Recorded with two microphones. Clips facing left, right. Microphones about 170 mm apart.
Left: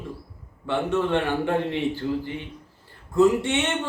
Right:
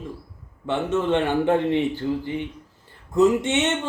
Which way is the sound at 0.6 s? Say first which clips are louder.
Right 1 dB; 20° right (ahead or behind).